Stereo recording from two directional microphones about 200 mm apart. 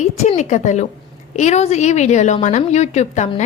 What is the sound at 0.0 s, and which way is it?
Speech, 35° left (ahead or behind).